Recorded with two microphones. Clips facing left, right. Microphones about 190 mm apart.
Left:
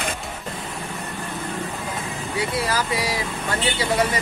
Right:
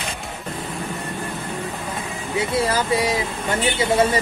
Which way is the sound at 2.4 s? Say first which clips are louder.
Right 3 dB; 25° right (ahead or behind).